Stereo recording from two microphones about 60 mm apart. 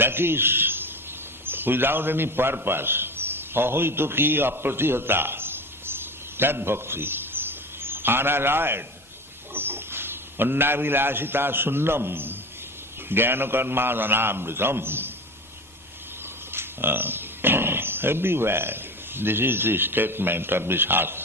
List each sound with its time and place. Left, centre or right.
0.0 s a man's voice: right
16.5 s speech: right